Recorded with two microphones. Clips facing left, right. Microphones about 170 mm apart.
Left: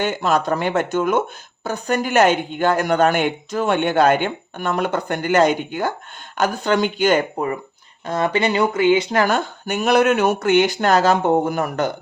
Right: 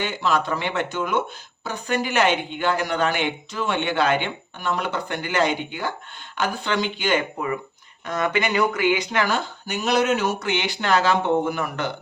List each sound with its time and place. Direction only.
0.0 s speech: 45° left (ahead or behind); by 9.0 s 25° left (ahead or behind)
9.1 s speech: 50° left (ahead or behind)